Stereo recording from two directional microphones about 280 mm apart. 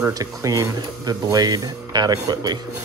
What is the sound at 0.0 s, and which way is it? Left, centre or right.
Speech, centre.